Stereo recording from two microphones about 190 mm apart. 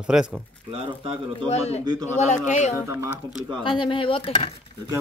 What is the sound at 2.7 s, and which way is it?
Speech, 15° right (ahead or behind).